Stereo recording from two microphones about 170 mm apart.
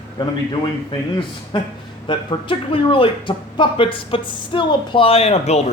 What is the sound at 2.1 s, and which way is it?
A man's voice, 30° left (ahead or behind).